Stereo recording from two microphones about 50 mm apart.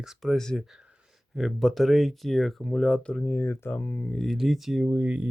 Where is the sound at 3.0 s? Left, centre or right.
Left.